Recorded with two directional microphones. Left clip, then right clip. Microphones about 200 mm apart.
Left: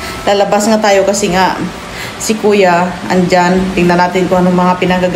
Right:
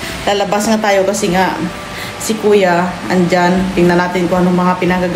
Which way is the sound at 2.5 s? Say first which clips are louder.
Left 2 dB; 5° left (ahead or behind).